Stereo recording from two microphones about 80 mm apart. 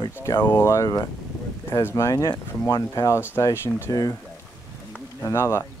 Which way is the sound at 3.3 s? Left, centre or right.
Left.